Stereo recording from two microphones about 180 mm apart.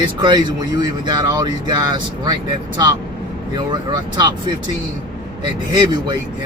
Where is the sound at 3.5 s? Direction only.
25° right (ahead or behind).